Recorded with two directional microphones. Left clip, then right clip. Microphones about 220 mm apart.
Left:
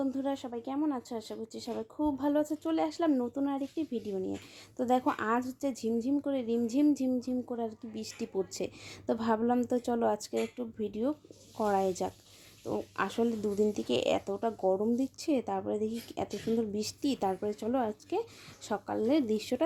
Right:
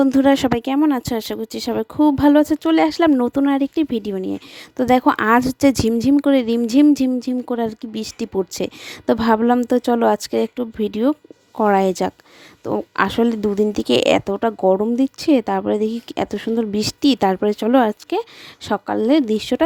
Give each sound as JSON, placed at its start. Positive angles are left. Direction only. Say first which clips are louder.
{"t": 0.0, "sound": "speech", "louder": "right 19 dB", "side_deg": -40}